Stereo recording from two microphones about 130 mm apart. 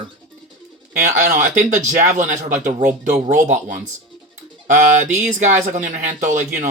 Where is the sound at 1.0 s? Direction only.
70° right (ahead or behind).